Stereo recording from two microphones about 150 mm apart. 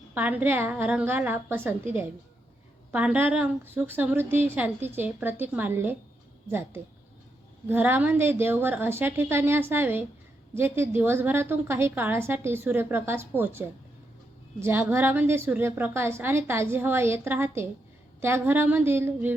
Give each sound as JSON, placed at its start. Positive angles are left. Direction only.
{"t": 0.1, "sound": "a woman's voice", "side_deg": -10}